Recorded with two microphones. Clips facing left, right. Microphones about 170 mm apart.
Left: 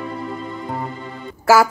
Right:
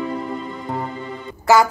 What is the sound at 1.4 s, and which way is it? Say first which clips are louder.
Music: left 1 dB; 5° left (ahead or behind).